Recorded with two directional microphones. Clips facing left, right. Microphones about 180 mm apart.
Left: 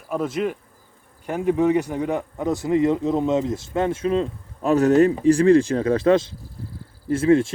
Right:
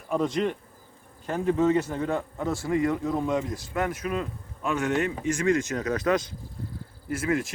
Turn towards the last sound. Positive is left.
turn(degrees=30)  # may be behind; listen again after turning